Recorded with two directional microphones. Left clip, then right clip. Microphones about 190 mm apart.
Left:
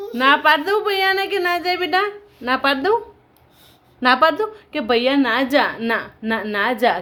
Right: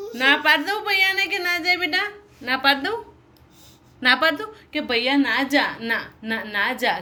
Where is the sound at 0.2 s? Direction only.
30° left (ahead or behind).